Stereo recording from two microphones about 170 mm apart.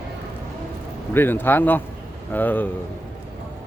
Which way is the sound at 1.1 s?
10° left (ahead or behind).